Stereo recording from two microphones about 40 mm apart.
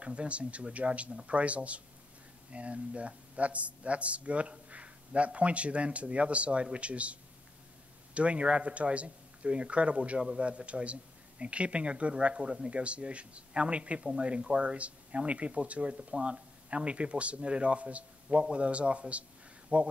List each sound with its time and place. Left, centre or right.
0.0 s a man's voice: right